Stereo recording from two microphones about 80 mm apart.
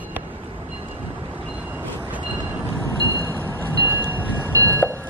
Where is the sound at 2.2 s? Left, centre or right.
Right.